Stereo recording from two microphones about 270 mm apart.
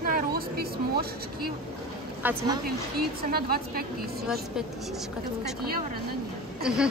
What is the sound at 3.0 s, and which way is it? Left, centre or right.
Speech, right.